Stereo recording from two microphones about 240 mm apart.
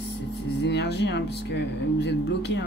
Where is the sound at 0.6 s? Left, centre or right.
Left.